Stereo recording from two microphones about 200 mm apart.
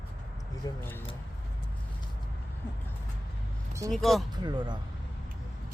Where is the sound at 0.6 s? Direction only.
20° left (ahead or behind).